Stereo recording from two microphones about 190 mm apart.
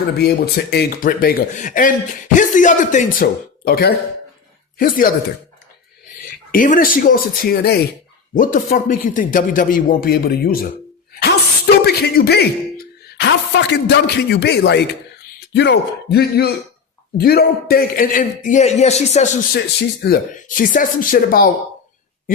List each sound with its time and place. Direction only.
0.2 s speech: 60° left (ahead or behind)
6.5 s speech: 45° left (ahead or behind)
11.9 s a sound: 55° left (ahead or behind)
13.1 s a man's voice: 70° left (ahead or behind); by 19.3 s 35° left (ahead or behind)
19.5 s a man's voice: 60° left (ahead or behind)
20.3 s speech: 45° left (ahead or behind)